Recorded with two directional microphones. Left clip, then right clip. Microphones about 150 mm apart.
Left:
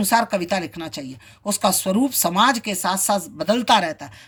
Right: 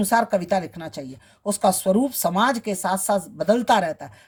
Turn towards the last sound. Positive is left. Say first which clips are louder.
# left 2 dB
turn(degrees=-45)  # may be behind; listen again after turning